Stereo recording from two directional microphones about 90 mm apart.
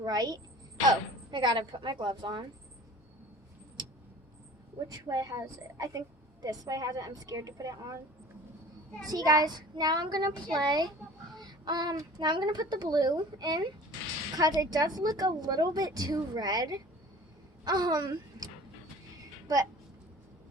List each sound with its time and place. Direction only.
0.0 s a woman's voice: 50° right (ahead or behind)
1.3 s a woman's voice: 60° right (ahead or behind)
4.9 s a woman's voice: 40° right (ahead or behind)
9.0 s a woman's voice: 45° right (ahead or behind)
11.3 s child singing: 50° right (ahead or behind)
12.2 s a woman's voice: 55° right (ahead or behind)